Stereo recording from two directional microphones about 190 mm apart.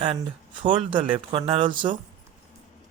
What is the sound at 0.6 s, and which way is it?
Speech, 25° right (ahead or behind).